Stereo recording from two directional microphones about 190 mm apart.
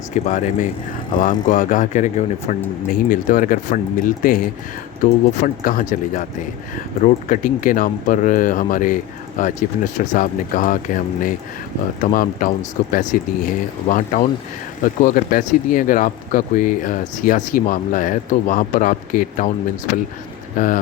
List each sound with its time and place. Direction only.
0.1 s speech: 40° left (ahead or behind)
20.6 s speech: 45° left (ahead or behind)